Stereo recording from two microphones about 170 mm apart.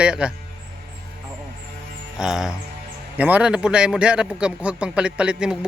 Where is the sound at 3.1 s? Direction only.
10° right (ahead or behind).